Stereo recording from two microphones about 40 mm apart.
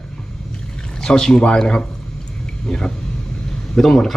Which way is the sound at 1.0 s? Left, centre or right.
Centre.